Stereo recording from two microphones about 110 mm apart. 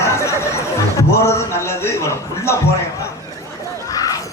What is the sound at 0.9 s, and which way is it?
A man's voice, 25° left (ahead or behind).